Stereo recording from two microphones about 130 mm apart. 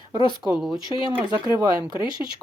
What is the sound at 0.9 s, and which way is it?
Speech, 35° left (ahead or behind).